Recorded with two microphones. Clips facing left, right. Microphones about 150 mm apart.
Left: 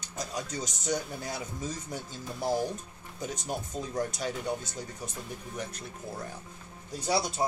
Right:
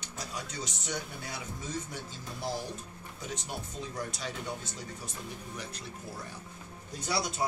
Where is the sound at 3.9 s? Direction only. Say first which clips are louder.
Left 7 dB; 45° left (ahead or behind).